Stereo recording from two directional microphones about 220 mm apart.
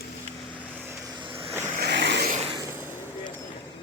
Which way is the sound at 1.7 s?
45° right (ahead or behind).